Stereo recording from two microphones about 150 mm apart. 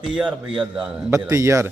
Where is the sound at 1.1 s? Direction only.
20° right (ahead or behind).